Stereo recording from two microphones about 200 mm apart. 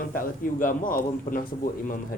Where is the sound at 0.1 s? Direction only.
45° left (ahead or behind).